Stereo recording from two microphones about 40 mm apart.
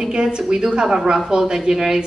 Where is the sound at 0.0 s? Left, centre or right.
Right.